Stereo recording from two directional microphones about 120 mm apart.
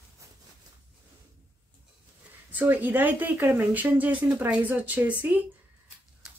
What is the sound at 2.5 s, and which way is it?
Speech, 15° right (ahead or behind).